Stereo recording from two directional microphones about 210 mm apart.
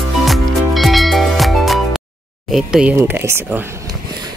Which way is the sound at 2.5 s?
5° right (ahead or behind).